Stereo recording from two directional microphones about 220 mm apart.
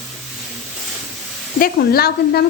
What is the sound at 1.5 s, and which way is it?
Sizzle, 40° left (ahead or behind).